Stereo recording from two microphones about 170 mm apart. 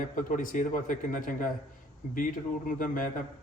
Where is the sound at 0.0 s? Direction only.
50° left (ahead or behind).